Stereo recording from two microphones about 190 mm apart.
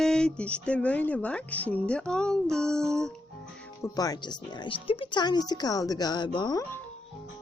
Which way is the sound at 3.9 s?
20° left (ahead or behind).